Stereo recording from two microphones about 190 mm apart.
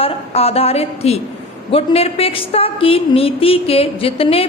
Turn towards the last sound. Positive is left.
turn(degrees=30)  # may be behind; listen again after turning